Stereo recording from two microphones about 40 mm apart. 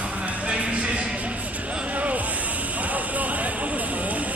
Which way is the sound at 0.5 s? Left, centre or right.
Right.